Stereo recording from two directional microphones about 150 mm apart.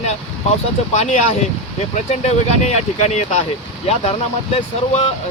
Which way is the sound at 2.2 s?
45° left (ahead or behind).